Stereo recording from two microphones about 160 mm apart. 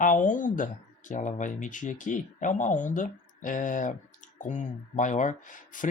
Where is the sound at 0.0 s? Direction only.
55° left (ahead or behind).